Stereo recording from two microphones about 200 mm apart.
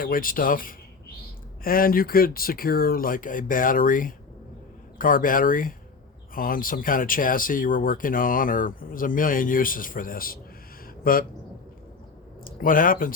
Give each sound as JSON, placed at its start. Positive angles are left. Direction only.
{"t": 0.0, "sound": "speech", "side_deg": 45}
{"t": 12.5, "sound": "speech", "side_deg": 45}